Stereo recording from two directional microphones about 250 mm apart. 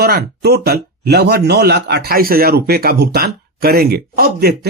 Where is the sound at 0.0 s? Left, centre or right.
Right.